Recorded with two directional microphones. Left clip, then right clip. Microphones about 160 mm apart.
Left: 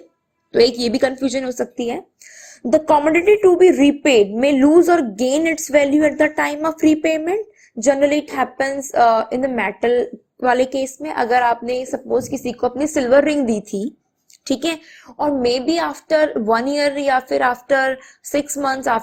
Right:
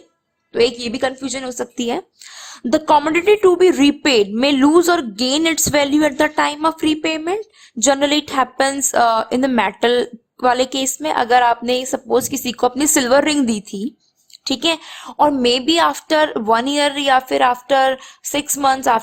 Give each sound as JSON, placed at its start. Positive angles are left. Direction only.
{"t": 0.5, "sound": "a woman's voice", "side_deg": 5}
{"t": 1.7, "sound": "a woman's voice", "side_deg": -20}
{"t": 6.4, "sound": "a woman's voice", "side_deg": -10}
{"t": 7.8, "sound": "a woman's voice", "side_deg": -25}
{"t": 10.4, "sound": "a woman's voice", "side_deg": -15}
{"t": 14.8, "sound": "a woman's voice", "side_deg": -25}